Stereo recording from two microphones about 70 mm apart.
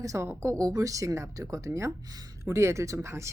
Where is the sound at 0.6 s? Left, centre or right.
Right.